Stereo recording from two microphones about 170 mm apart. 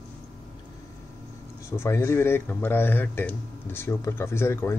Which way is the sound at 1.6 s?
15° left (ahead or behind).